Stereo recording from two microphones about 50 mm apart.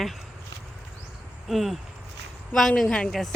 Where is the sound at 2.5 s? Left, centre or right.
Centre.